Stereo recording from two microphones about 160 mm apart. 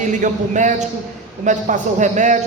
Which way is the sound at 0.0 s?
50° right (ahead or behind).